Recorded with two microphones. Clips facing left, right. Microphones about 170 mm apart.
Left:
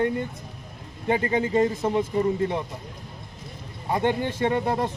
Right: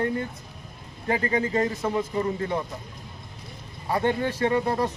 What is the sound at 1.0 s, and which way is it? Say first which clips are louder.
Speech: left 2 dB; 25° left (ahead or behind).